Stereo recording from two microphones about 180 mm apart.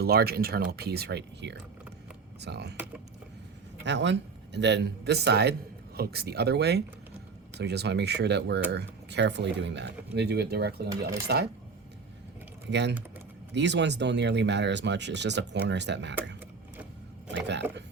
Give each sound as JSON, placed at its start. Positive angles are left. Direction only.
{"t": 0.0, "sound": "speech", "side_deg": -60}
{"t": 2.7, "sound": "speech", "side_deg": -10}
{"t": 3.8, "sound": "speech", "side_deg": -75}
{"t": 13.5, "sound": "speech", "side_deg": -75}
{"t": 17.3, "sound": "speech", "side_deg": -80}